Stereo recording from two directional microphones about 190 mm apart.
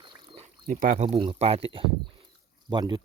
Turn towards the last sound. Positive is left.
turn(degrees=-25)  # may be behind; listen again after turning